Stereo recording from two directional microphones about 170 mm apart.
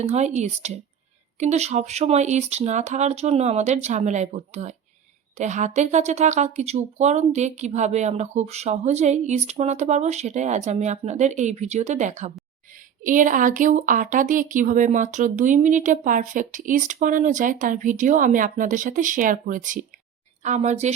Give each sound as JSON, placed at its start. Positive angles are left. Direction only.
{"t": 0.0, "sound": "speech", "side_deg": -40}